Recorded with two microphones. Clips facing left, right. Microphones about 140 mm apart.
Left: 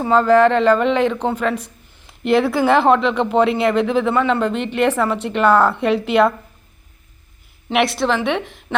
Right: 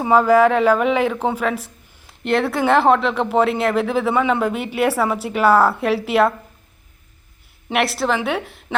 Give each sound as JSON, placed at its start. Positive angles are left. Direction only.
{"t": 0.0, "sound": "speech", "side_deg": -10}
{"t": 7.7, "sound": "speech", "side_deg": 0}